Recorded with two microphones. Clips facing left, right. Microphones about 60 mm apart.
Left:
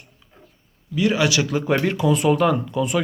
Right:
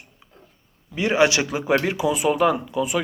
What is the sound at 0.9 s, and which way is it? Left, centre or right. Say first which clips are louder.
Speech: right 1 dB; right.